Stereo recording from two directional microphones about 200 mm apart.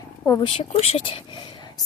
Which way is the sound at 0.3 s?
25° left (ahead or behind).